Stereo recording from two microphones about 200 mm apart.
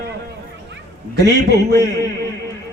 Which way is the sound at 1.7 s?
15° left (ahead or behind).